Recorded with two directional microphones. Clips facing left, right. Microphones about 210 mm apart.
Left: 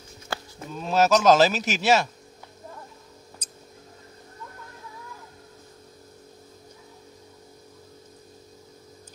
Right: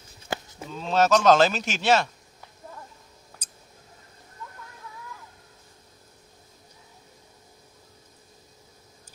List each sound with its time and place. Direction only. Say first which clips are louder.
0.3 s cattle: right 2 dB; 20° right (ahead or behind)
0.7 s speech: left 1 dB; 10° left (ahead or behind)